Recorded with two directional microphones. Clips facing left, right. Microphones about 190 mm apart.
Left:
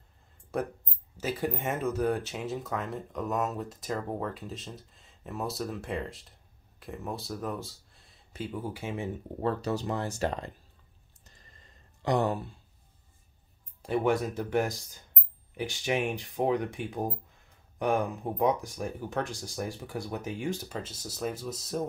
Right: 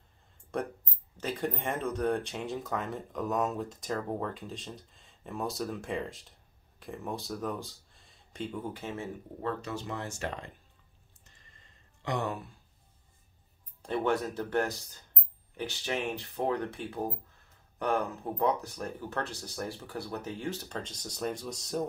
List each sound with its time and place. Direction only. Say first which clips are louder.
0.5 s speech: left 2 dB; 5° left (ahead or behind)
9.4 s speech: left 5 dB; 35° left (ahead or behind)
12.0 s speech: left 6 dB; 35° left (ahead or behind)
13.8 s speech: left 3 dB; 10° left (ahead or behind)